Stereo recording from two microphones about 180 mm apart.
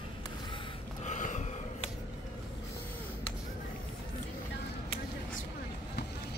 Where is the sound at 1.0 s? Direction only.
45° left (ahead or behind).